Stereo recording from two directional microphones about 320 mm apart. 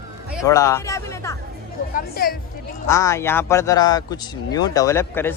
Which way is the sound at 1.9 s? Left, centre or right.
Left.